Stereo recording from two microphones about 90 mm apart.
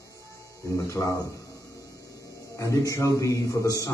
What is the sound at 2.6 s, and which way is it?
A man's voice, 35° left (ahead or behind).